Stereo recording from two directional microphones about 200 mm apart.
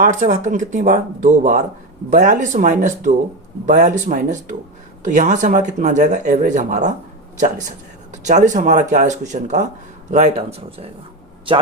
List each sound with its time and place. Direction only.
0.0 s speech: 40° right (ahead or behind)
8.1 s speech: 35° right (ahead or behind)